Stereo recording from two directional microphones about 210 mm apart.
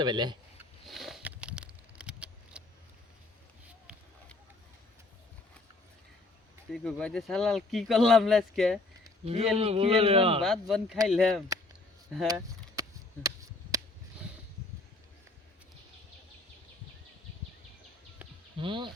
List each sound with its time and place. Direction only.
0.0 s speech: 20° right (ahead or behind)
0.9 s a sound: centre (ahead or behind)
6.7 s speech: centre (ahead or behind)
9.2 s speech: 30° right (ahead or behind)
10.4 s speech: centre (ahead or behind)
13.2 s a sound: 15° right (ahead or behind)
18.6 s speech: 25° right (ahead or behind)